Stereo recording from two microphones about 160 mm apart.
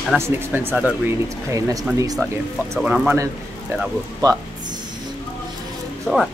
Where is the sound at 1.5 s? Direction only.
20° right (ahead or behind).